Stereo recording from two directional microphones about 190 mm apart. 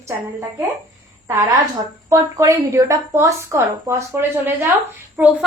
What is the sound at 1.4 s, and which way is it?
A woman's voice, 20° right (ahead or behind).